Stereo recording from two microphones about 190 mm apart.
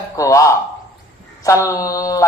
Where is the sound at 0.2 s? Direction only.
15° left (ahead or behind).